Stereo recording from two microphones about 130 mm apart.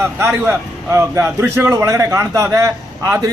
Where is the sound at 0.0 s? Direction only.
20° right (ahead or behind).